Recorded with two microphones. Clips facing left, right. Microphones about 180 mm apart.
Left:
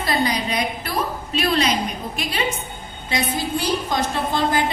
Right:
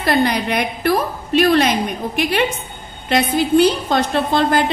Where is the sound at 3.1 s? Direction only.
65° right (ahead or behind).